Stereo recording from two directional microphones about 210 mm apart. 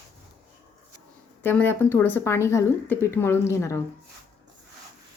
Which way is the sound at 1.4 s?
10° left (ahead or behind).